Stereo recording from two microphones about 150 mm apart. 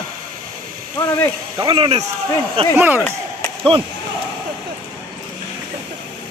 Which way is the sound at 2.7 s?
15° right (ahead or behind).